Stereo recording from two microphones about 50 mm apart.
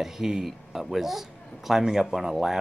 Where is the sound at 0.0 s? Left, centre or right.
Centre.